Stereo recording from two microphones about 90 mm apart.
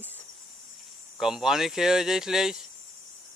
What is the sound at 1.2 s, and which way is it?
Speech, 5° right (ahead or behind).